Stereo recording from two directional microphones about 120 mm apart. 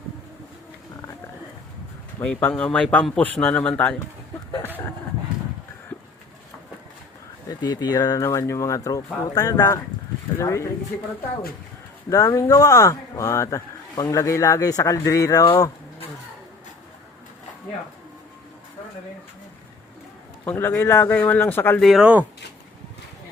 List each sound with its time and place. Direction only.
2.2 s speech: 15° left (ahead or behind)
7.4 s speech: 35° left (ahead or behind)
12.0 s speech: 25° left (ahead or behind)
20.5 s speech: 20° left (ahead or behind)
21.8 s speech: centre (ahead or behind)
22.0 s speech: 10° right (ahead or behind)